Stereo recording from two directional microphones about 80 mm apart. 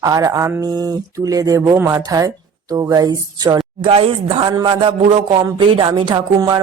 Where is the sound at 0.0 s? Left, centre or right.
Right.